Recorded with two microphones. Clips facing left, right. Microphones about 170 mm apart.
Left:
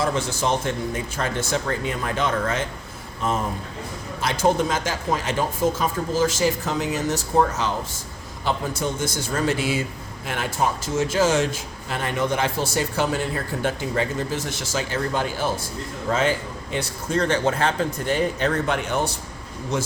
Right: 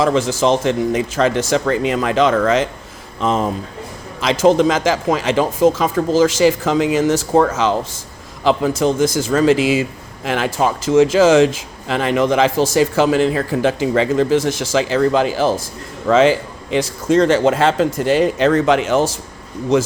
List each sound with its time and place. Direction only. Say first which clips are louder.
0.0 s speech: right 8 dB; 90° right